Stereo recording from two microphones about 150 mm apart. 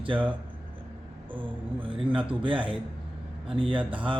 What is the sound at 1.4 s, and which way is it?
Speech, 35° right (ahead or behind).